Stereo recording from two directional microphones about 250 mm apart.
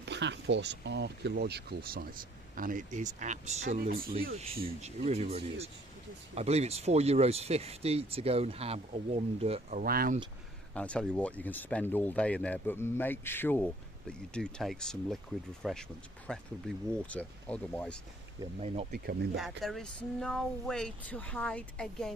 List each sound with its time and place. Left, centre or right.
0.0 s speech: right
10.8 s speech: centre
18.6 s speech: right
18.9 s speech: right
19.4 s speech: centre